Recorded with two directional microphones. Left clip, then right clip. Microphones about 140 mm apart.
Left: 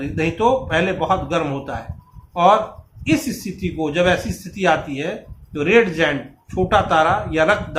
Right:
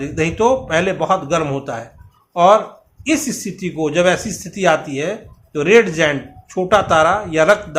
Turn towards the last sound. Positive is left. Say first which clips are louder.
# right 3 dB
turn(degrees=-70)  # may be behind; listen again after turning